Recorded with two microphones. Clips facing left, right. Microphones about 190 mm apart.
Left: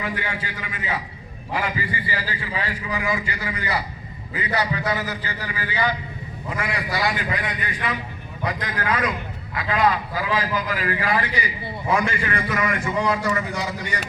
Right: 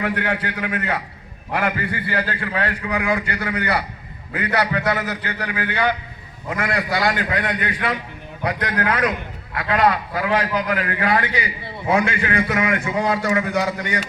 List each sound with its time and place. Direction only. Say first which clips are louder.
0.0 s a man's voice: right 6 dB; 65° right (ahead or behind)